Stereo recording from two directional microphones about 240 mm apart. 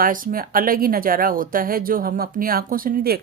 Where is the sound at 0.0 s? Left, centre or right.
Right.